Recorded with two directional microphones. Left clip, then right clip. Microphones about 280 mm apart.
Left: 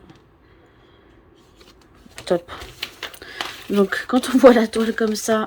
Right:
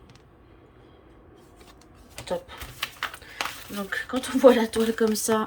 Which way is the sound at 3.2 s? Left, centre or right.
Left.